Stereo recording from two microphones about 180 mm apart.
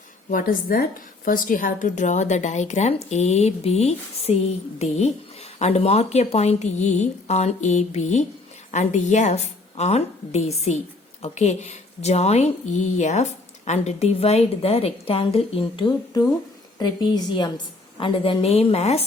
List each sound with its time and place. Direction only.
0.3 s a woman's voice: 50° left (ahead or behind); by 19.0 s 35° left (ahead or behind)